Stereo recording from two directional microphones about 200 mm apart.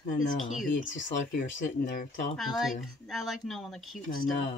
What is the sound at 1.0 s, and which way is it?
Speech, 65° left (ahead or behind).